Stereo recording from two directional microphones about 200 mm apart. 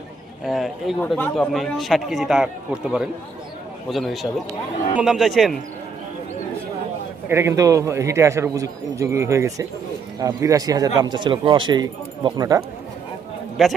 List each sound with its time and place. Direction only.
0.4 s a man's voice: centre (ahead or behind)
7.3 s a man's voice: 15° right (ahead or behind)
13.6 s a man's voice: centre (ahead or behind)